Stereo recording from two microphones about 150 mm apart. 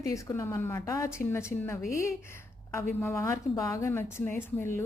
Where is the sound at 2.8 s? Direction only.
20° left (ahead or behind).